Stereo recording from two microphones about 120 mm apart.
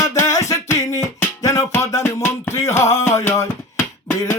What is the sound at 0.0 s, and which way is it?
Music, 25° left (ahead or behind).